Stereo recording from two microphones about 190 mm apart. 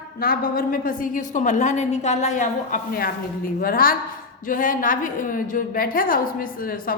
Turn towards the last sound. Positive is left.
turn(degrees=50)  # may be behind; listen again after turning